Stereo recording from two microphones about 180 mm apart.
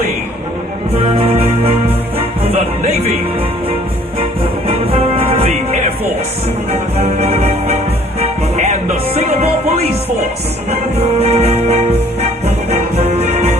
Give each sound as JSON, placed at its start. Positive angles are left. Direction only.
{"t": 0.9, "sound": "music", "side_deg": -30}
{"t": 4.9, "sound": "music", "side_deg": -30}
{"t": 7.0, "sound": "music", "side_deg": -35}
{"t": 10.7, "sound": "music", "side_deg": -35}